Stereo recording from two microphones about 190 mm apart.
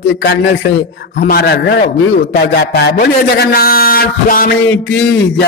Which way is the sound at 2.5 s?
55° left (ahead or behind).